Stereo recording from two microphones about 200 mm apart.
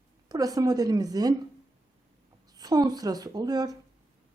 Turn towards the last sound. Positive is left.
turn(degrees=-20)  # may be behind; listen again after turning